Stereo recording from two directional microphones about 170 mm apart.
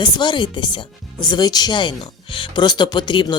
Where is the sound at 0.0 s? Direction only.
25° left (ahead or behind).